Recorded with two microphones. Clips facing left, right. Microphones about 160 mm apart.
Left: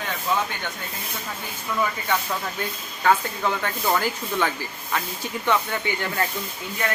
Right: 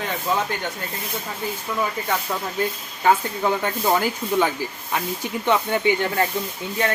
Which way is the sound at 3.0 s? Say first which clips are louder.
Right 2 dB; 20° right (ahead or behind).